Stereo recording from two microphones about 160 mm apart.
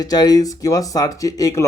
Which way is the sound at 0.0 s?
25° left (ahead or behind).